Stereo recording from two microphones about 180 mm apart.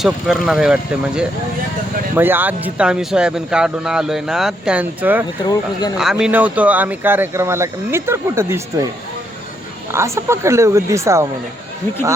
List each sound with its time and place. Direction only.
0.0 s speech: centre (ahead or behind)
9.9 s speech: 15° right (ahead or behind)